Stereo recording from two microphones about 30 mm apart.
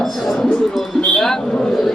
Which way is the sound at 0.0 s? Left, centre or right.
Centre.